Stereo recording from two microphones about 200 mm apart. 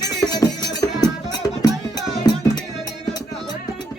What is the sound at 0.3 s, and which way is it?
Music, 20° left (ahead or behind).